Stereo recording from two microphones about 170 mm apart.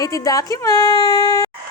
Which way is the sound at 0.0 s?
20° left (ahead or behind).